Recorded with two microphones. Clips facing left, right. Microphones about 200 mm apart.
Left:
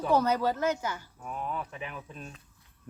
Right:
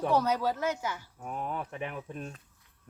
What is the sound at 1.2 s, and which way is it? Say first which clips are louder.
Speech: even; 50° right (ahead or behind).